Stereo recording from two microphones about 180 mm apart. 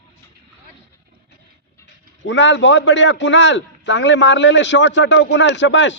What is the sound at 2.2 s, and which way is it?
A man's voice, 85° left.